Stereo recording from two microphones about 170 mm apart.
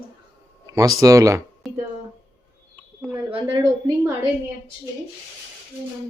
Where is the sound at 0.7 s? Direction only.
20° right (ahead or behind).